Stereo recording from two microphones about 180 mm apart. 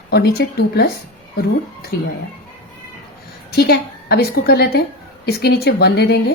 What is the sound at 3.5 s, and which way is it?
A woman's voice, 60° left (ahead or behind).